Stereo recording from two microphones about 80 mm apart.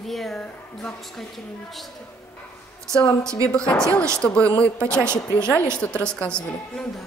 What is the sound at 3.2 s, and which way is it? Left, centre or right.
Speech, right.